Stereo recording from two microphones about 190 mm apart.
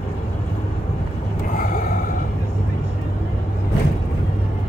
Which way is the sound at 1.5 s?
45° left (ahead or behind).